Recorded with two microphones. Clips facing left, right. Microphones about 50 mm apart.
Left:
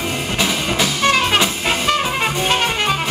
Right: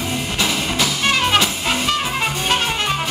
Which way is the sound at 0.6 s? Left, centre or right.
Left.